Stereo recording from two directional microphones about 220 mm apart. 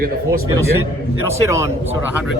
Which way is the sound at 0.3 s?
10° right (ahead or behind).